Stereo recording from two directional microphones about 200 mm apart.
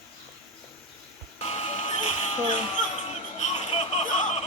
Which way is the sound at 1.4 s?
30° left (ahead or behind).